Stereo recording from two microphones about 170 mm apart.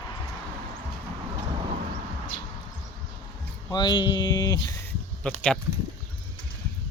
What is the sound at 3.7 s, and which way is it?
Speech, 25° left (ahead or behind).